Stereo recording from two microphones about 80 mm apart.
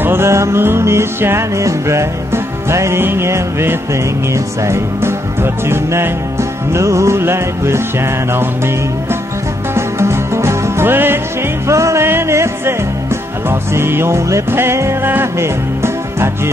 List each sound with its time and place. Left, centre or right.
0.0 s music: right
9.8 s music: right
11.6 s music: right